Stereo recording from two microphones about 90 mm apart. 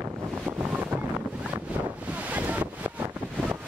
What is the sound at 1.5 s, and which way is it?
Wind noise, 60° right (ahead or behind).